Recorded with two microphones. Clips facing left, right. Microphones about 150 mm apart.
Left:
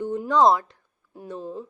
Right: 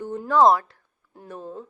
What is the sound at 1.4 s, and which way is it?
Speech, 10° left (ahead or behind).